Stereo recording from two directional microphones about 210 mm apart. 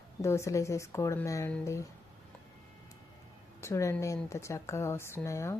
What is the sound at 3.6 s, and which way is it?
Speech, 15° left (ahead or behind).